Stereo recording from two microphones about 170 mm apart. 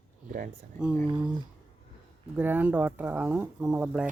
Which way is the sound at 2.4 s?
10° right (ahead or behind).